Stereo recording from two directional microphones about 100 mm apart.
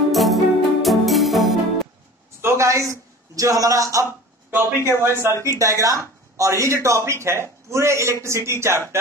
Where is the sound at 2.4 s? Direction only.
30° right (ahead or behind).